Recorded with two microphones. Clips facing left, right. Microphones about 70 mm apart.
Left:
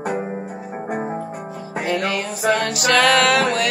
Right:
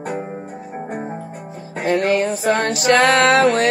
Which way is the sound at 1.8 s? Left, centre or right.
Right.